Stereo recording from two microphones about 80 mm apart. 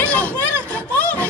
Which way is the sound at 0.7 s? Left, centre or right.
Centre.